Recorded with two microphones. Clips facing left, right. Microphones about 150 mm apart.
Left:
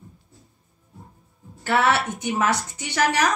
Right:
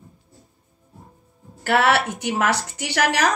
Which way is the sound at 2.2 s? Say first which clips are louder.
Right 1 dB; 75° right (ahead or behind).